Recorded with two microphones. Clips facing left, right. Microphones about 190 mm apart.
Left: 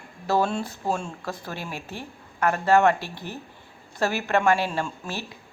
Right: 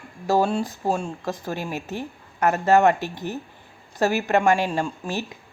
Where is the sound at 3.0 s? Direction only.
45° right (ahead or behind).